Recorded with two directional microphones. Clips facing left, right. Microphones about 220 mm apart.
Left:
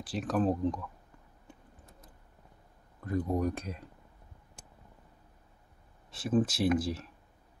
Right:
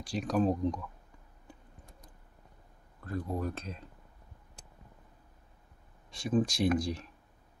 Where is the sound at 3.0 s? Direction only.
15° left (ahead or behind).